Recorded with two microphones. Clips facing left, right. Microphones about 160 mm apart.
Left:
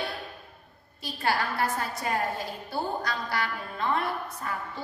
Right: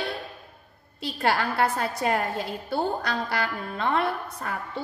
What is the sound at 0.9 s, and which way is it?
A woman's voice, 75° right (ahead or behind).